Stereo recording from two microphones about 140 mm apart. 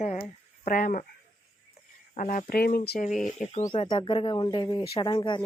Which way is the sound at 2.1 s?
65° left (ahead or behind).